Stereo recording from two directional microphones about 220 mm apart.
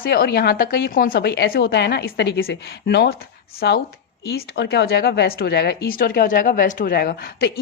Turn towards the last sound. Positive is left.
turn(degrees=45)  # may be behind; listen again after turning